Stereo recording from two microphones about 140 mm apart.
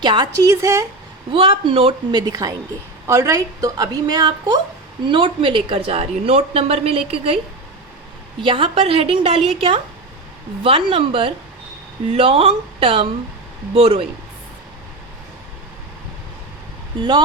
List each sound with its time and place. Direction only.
0.0 s speech: 30° right (ahead or behind)
0.5 s a woman's voice: 20° right (ahead or behind)
1.3 s speech: 40° right (ahead or behind)
2.2 s a woman's voice: 25° right (ahead or behind); by 7.3 s 40° right (ahead or behind)
8.4 s speech: 40° right (ahead or behind)
17.0 s speech: 30° right (ahead or behind)